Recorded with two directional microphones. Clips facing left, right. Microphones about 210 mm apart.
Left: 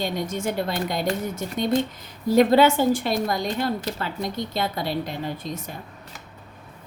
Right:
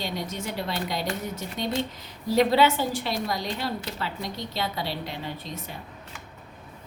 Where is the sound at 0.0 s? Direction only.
50° left (ahead or behind).